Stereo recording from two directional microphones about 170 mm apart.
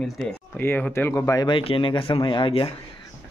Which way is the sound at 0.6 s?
15° left (ahead or behind).